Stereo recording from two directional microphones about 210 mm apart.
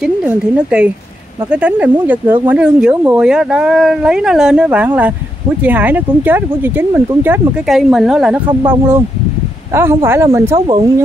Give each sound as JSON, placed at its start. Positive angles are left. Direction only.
{"t": 0.6, "sound": "speech", "side_deg": -5}
{"t": 9.8, "sound": "speech", "side_deg": -10}